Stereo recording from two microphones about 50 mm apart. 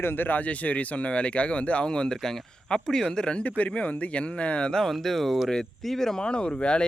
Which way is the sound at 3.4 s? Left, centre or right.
Left.